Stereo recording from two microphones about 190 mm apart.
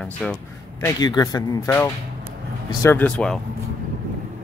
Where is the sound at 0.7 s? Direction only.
20° left (ahead or behind).